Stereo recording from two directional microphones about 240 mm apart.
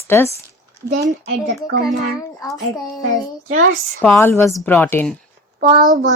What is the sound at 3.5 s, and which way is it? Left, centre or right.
Speech, right.